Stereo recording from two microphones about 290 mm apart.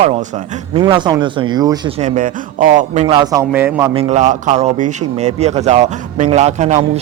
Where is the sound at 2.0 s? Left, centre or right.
Right; by 3.9 s centre.